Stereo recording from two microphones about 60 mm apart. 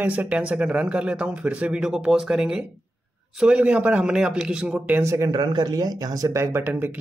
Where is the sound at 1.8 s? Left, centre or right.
Centre.